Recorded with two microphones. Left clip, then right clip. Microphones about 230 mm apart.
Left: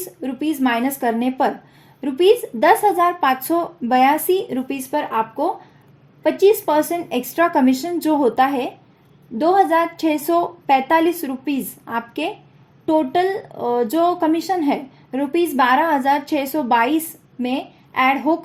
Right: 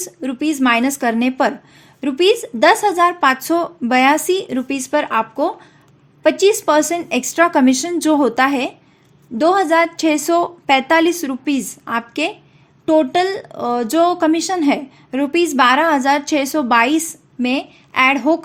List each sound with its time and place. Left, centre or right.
0.0 s a woman's voice: right